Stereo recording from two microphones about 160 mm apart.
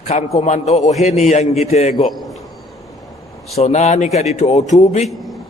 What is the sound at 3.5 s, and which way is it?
A man's voice, 45° left (ahead or behind).